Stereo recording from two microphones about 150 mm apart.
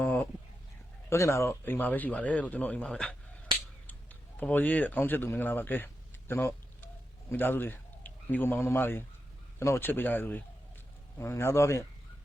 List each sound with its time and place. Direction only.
0.0 s chicken: 10° left (ahead or behind)
1.1 s speech: 20° left (ahead or behind)
3.8 s a sound: 10° left (ahead or behind)
9.6 s speech: 15° left (ahead or behind)